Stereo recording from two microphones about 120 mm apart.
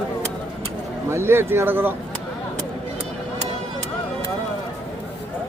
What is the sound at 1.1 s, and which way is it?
Speech, 20° right (ahead or behind).